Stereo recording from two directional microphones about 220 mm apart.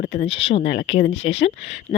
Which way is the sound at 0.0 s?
40° left (ahead or behind).